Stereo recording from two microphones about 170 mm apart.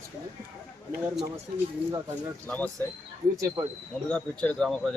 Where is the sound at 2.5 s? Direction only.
10° left (ahead or behind).